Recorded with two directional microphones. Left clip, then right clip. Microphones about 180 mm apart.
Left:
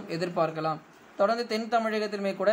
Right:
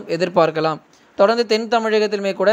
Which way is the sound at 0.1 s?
40° right (ahead or behind).